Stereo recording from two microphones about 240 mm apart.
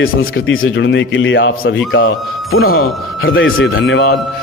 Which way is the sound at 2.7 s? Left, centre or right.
Left.